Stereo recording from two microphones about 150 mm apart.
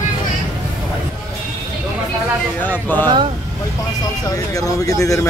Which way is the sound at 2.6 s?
10° left (ahead or behind).